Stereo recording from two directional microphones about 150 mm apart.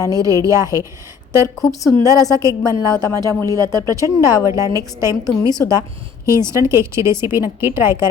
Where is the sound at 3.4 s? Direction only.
25° right (ahead or behind).